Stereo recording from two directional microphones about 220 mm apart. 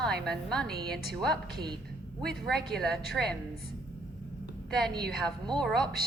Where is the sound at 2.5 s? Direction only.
Centre (ahead or behind).